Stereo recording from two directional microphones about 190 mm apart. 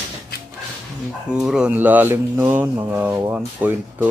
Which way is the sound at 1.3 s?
5° right (ahead or behind).